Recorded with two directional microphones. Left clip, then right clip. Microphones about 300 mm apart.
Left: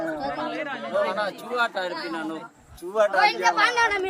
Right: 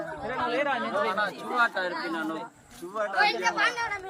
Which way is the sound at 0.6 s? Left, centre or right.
Centre.